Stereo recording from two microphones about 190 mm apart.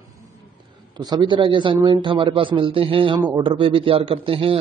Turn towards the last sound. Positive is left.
turn(degrees=-30)  # may be behind; listen again after turning